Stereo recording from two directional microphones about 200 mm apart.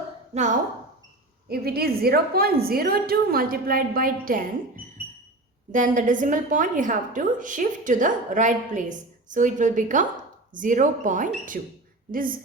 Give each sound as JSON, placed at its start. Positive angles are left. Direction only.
{"t": 0.3, "sound": "a woman's voice", "side_deg": -35}
{"t": 1.5, "sound": "a woman's voice", "side_deg": -50}
{"t": 5.7, "sound": "a woman's voice", "side_deg": -40}